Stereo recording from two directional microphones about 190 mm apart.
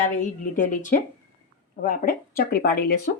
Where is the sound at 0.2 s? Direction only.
45° left (ahead or behind).